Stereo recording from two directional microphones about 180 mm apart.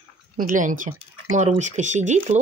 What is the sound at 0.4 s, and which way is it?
Speech, 45° right (ahead or behind).